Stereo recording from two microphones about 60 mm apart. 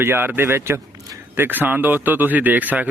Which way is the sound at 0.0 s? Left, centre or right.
Right.